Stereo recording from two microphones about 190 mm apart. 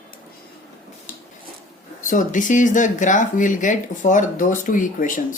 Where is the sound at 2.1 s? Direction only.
45° left (ahead or behind).